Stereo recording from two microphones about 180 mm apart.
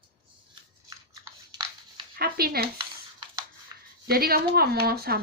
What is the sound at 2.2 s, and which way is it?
Speech, 55° right (ahead or behind).